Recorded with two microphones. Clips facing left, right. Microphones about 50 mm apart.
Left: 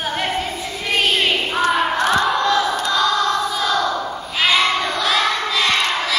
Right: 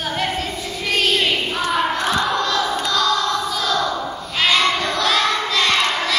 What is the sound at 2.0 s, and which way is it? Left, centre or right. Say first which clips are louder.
Battle cry: left 3 dB; left.